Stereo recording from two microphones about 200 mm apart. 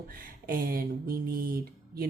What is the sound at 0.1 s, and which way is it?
Speech, 45° right (ahead or behind).